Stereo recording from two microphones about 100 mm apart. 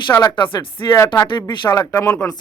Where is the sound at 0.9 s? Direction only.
35° left (ahead or behind).